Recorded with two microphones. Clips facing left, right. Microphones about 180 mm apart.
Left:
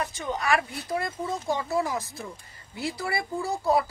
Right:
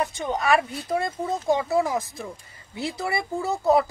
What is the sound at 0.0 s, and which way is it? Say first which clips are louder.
Speech: right 4 dB; 25° right (ahead or behind).